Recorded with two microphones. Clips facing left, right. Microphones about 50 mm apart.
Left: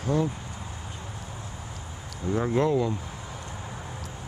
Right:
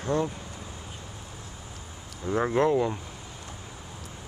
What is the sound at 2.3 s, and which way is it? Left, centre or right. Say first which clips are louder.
Speech: right 1 dB; centre.